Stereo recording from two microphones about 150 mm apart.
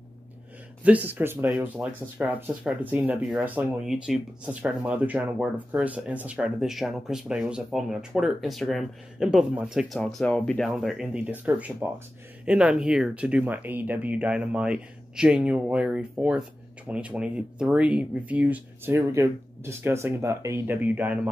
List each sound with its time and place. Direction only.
0.8 s speech: 10° right (ahead or behind)
18.9 s speech: 20° right (ahead or behind)